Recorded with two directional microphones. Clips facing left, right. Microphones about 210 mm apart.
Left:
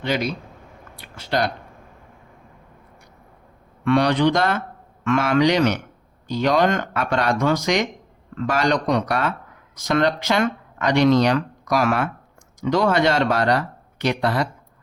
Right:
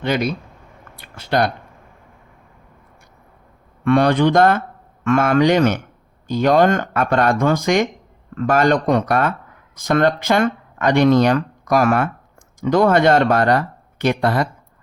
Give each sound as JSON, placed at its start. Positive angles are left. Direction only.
{"t": 0.0, "sound": "a man's voice", "side_deg": -55}
{"t": 3.8, "sound": "speech", "side_deg": -50}